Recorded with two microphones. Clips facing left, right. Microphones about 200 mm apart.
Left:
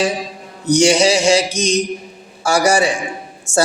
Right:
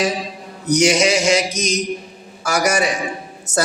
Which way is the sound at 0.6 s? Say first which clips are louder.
Left 3 dB; 30° left (ahead or behind).